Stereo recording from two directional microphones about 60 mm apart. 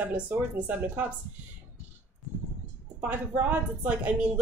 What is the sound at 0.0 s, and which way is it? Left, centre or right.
A woman's voice, right.